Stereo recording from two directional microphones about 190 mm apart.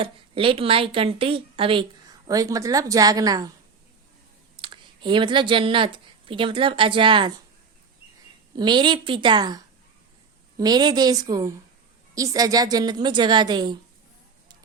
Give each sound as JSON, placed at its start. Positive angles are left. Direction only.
{"t": 0.0, "sound": "a woman's voice", "side_deg": -30}
{"t": 4.5, "sound": "speech", "side_deg": -25}
{"t": 8.5, "sound": "a woman's voice", "side_deg": -25}
{"t": 10.6, "sound": "a woman's voice", "side_deg": -20}